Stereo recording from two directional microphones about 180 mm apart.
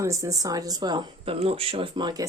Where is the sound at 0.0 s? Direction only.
15° right (ahead or behind).